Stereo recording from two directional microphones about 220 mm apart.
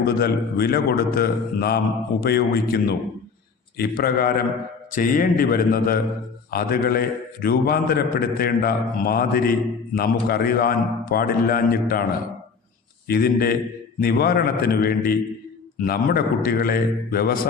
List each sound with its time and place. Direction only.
0.0 s a man's voice: 45° left (ahead or behind)
13.1 s a man's voice: 45° left (ahead or behind)